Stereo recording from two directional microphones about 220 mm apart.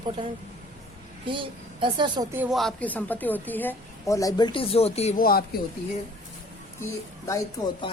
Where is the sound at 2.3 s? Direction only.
5° right (ahead or behind); by 5.4 s 40° left (ahead or behind).